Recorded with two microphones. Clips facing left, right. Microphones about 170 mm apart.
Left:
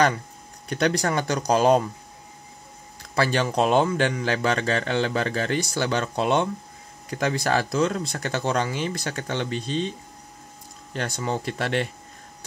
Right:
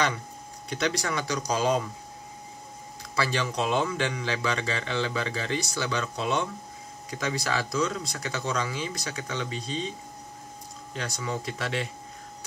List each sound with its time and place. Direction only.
0.7 s speech: 60° left (ahead or behind)
3.2 s a man's voice: 50° left (ahead or behind); by 9.8 s 65° left (ahead or behind)
10.9 s a man's voice: 60° left (ahead or behind)